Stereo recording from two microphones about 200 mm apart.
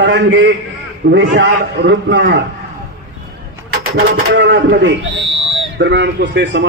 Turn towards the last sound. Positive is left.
turn(degrees=-65)  # may be behind; listen again after turning